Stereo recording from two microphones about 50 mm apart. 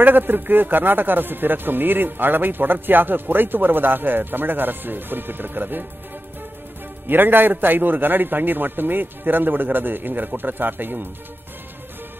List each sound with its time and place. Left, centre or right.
0.0 s a man's voice: right
7.1 s a man's voice: right